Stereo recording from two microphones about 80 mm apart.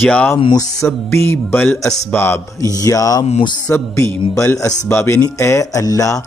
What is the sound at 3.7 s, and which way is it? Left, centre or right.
Speech, left.